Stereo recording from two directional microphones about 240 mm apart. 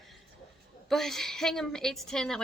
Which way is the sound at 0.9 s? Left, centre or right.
Centre.